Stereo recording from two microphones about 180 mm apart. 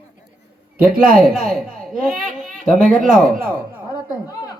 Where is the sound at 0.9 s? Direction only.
50° right (ahead or behind).